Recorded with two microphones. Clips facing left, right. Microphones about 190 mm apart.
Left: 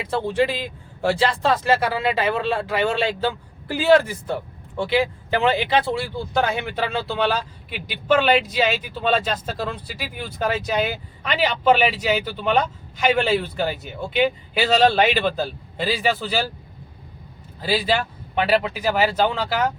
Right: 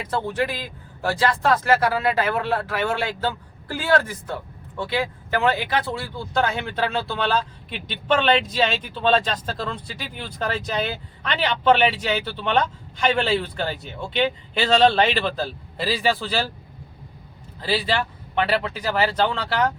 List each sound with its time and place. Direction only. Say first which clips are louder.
0.1 s speech: left 4 dB; 25° left (ahead or behind); by 16.4 s centre (ahead or behind)
17.6 s speech: left 2 dB; 5° left (ahead or behind)